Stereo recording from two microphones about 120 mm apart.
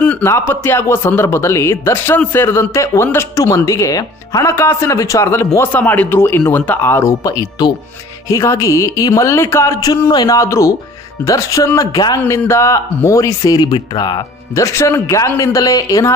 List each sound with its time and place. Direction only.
0.0 s a sound: 10° left (ahead or behind)
0.3 s a man's voice: 20° left (ahead or behind)
12.2 s a man's voice: 20° left (ahead or behind)